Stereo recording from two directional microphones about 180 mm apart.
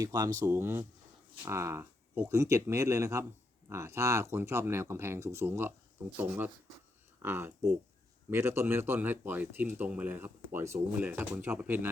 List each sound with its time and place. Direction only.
0.0 s speech: 20° right (ahead or behind)